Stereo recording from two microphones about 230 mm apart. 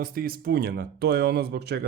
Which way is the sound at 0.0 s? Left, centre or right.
Right.